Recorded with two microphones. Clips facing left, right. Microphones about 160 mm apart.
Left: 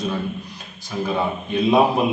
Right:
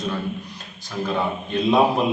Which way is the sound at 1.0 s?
5° left (ahead or behind).